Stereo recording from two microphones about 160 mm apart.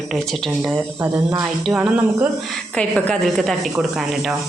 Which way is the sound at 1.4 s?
5° right (ahead or behind).